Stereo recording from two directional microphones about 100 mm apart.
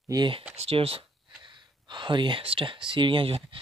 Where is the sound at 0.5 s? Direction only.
75° right (ahead or behind).